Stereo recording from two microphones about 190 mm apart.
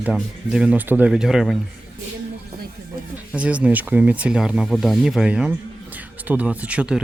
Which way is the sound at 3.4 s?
5° right (ahead or behind).